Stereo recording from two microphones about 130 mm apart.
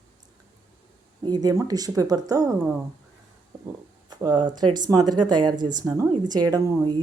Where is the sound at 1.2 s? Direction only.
30° right (ahead or behind).